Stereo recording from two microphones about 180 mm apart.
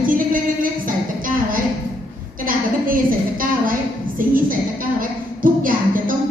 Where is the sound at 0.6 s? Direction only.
50° right (ahead or behind).